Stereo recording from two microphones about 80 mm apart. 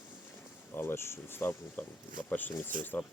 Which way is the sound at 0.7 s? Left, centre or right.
Left.